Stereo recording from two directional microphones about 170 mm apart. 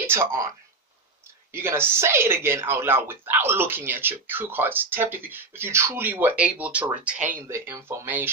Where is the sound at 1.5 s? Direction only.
15° right (ahead or behind).